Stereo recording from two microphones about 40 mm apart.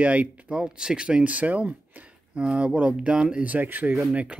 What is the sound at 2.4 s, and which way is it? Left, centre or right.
Speech, right.